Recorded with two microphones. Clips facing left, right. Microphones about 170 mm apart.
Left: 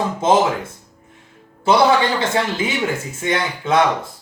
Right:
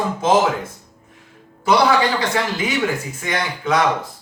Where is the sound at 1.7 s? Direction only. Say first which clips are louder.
Left 1 dB; 25° left (ahead or behind).